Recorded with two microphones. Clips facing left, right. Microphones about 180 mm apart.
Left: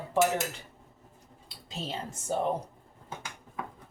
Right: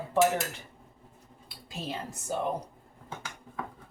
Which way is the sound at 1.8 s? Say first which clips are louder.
Even; 25° left (ahead or behind).